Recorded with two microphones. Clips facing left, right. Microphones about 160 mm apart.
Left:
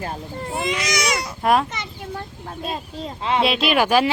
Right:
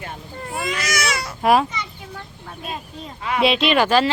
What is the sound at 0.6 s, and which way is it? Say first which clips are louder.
Baby cry: left 1 dB; 20° left (ahead or behind).